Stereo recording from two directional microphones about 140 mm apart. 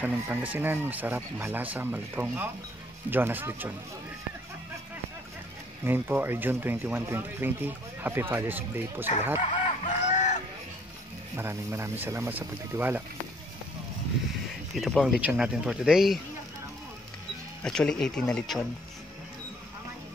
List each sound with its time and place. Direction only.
0.0 s speech: 10° right (ahead or behind)
5.9 s speech: 15° right (ahead or behind)
9.4 s chicken: 60° left (ahead or behind)
11.3 s speech: 15° right (ahead or behind)
14.8 s speech: centre (ahead or behind)
17.6 s speech: 5° left (ahead or behind)